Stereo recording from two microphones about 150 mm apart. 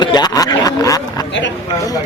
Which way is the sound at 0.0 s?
30° left (ahead or behind).